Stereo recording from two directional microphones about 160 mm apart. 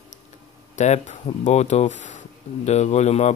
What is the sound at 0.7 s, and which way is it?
Speech, 45° left (ahead or behind).